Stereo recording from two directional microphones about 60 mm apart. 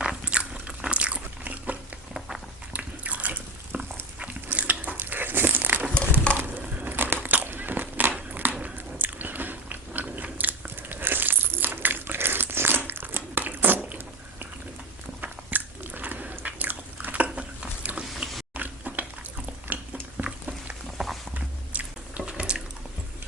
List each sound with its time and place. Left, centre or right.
0.0 s biting: centre
2.1 s walk: centre
2.7 s drip: right
4.5 s biting: right
6.3 s crushing: right
6.8 s crumpling: right
8.3 s biting: right
15.2 s biting: right
18.5 s a sound: right
19.7 s boiling: right
20.2 s a sound: right
21.0 s a sound: centre
21.7 s biting: right
22.2 s water: centre